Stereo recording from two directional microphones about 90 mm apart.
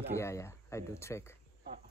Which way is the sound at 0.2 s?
30° left (ahead or behind).